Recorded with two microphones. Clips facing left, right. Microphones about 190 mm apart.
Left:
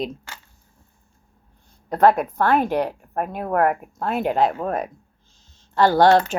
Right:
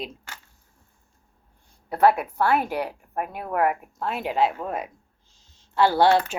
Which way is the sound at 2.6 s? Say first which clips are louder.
Left 6 dB; 5° right (ahead or behind).